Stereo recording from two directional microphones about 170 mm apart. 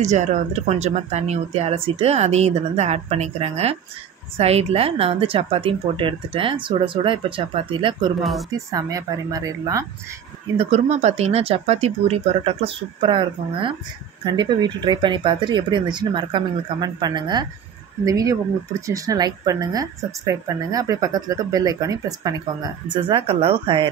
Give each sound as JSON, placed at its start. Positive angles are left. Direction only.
{"t": 0.0, "sound": "speech", "side_deg": -45}
{"t": 8.2, "sound": "speech", "side_deg": 0}
{"t": 8.5, "sound": "a woman's voice", "side_deg": -20}
{"t": 10.6, "sound": "a woman's voice", "side_deg": -40}